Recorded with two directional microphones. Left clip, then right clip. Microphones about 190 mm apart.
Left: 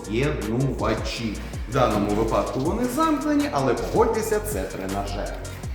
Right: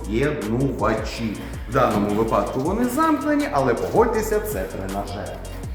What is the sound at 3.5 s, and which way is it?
Speech, 20° right (ahead or behind).